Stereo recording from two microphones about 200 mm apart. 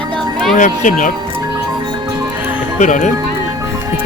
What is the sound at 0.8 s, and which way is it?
Speech, 40° left (ahead or behind).